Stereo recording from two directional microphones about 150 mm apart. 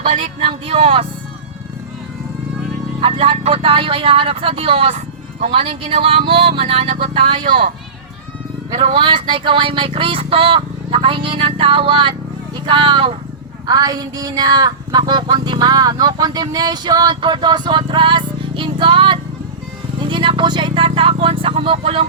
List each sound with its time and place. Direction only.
0.0 s speech: 50° right (ahead or behind)
3.0 s speech: 40° right (ahead or behind)
7.1 s speech: 35° right (ahead or behind)
8.8 s speech: 40° right (ahead or behind)
13.7 s a sound: 25° right (ahead or behind)